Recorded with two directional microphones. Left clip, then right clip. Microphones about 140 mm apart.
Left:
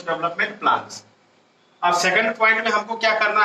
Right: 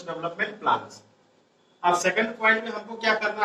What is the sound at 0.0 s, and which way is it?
A man's voice, 20° left (ahead or behind).